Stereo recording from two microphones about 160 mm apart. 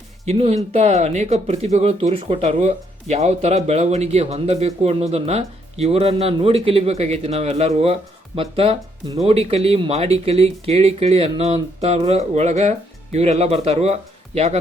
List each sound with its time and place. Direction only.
0.3 s speech: 40° right (ahead or behind)